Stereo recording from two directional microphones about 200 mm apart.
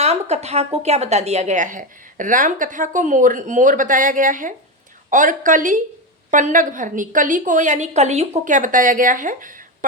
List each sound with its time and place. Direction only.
0.0 s a woman's voice: 35° right (ahead or behind)